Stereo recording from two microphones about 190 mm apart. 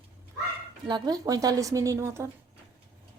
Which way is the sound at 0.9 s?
25° right (ahead or behind).